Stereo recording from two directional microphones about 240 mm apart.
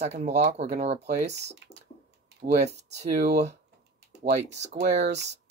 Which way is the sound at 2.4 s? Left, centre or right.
Right.